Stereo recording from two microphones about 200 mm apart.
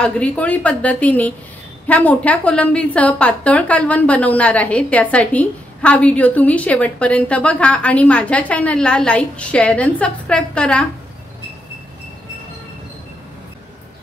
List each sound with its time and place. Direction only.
0.0 s a woman's voice: 5° left (ahead or behind)